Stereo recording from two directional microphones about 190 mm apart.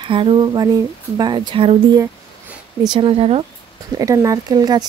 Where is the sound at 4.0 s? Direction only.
20° right (ahead or behind).